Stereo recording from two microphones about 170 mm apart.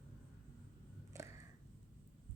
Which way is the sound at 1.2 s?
15° right (ahead or behind).